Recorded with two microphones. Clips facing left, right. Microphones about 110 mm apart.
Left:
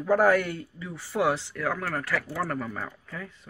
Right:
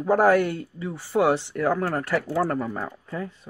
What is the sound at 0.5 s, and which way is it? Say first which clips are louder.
Speech: right 6 dB; 45° right (ahead or behind).